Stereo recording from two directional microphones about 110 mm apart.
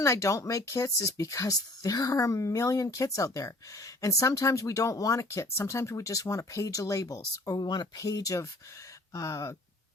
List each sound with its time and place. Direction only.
0.0 s speech: 25° left (ahead or behind)